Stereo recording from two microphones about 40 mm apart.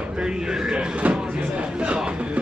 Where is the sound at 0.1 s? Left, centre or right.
Centre.